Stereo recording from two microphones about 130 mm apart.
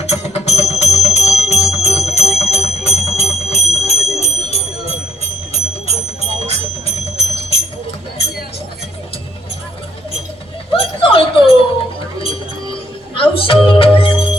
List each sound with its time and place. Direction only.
0.0 s music: 55° left (ahead or behind)
2.5 s jingle bell: 55° left (ahead or behind)
10.7 s a sound: 45° left (ahead or behind)
12.2 s music: 45° left (ahead or behind)